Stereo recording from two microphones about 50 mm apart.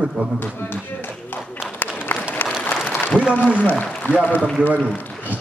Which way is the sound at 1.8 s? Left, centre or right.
Left.